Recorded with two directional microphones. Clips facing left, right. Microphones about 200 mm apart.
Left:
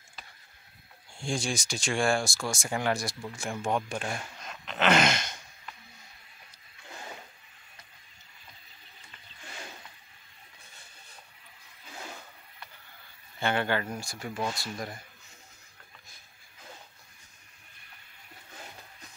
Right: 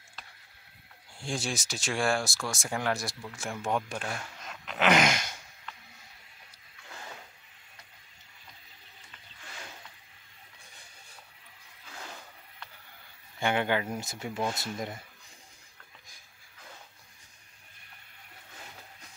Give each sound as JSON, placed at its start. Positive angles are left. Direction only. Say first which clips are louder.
{"t": 1.1, "sound": "speech", "louder": "left 2 dB", "side_deg": -5}
{"t": 4.5, "sound": "a sound", "louder": "even", "side_deg": -5}
{"t": 13.4, "sound": "speech", "louder": "right 1 dB", "side_deg": -15}